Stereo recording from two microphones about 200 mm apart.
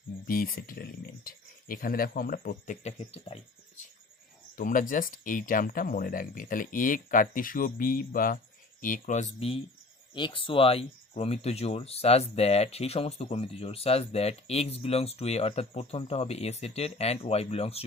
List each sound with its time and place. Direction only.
0.3 s speech: 45° left (ahead or behind); by 3.4 s 30° left (ahead or behind)
4.5 s speech: 40° left (ahead or behind)